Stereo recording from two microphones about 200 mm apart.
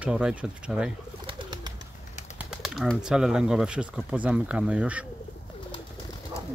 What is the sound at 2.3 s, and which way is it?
Speech, centre (ahead or behind).